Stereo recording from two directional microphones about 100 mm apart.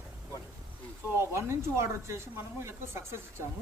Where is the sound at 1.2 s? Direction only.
25° right (ahead or behind).